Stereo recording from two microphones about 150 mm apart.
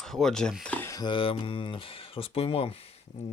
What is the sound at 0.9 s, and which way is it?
Speech, 30° left (ahead or behind).